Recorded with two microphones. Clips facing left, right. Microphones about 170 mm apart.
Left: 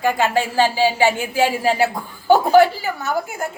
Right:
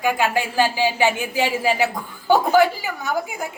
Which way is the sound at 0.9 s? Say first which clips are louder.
Left 2 dB; 15° right (ahead or behind).